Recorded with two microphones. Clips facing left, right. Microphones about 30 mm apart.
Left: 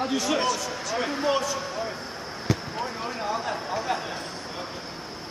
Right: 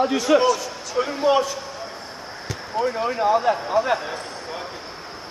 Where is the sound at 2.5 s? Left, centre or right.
Centre.